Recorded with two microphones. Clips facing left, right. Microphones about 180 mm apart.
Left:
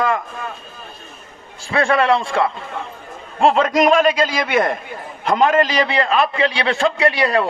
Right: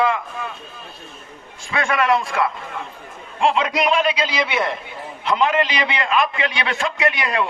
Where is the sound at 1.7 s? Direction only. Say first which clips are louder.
Left 3 dB; 35° left (ahead or behind).